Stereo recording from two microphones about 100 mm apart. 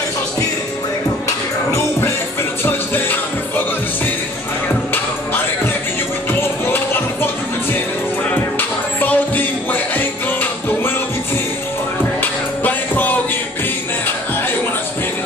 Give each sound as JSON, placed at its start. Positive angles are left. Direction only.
{"t": 2.6, "sound": "music", "side_deg": 20}
{"t": 8.3, "sound": "music", "side_deg": 15}
{"t": 12.2, "sound": "music", "side_deg": 15}